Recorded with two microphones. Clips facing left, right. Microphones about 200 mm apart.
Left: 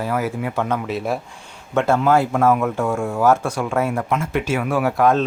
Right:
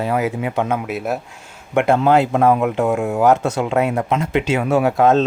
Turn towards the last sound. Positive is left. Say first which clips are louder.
# right 3 dB
turn(degrees=-25)  # may be behind; listen again after turning